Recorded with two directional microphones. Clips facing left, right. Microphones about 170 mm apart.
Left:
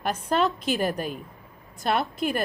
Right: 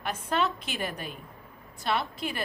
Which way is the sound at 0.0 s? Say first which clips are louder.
Left 5 dB; 40° left (ahead or behind).